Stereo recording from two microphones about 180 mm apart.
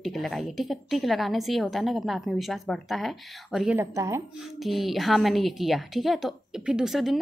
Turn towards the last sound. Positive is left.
turn(degrees=0)  # may be behind; listen again after turning